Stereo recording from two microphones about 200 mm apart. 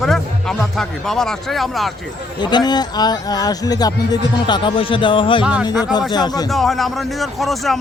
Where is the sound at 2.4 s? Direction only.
20° left (ahead or behind).